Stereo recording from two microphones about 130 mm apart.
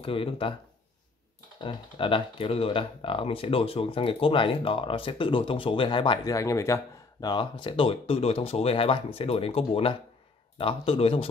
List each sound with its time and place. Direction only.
0.0 s speech: 45° left (ahead or behind)
1.6 s speech: 40° left (ahead or behind)
6.3 s speech: 25° left (ahead or behind); by 11.2 s 45° left (ahead or behind)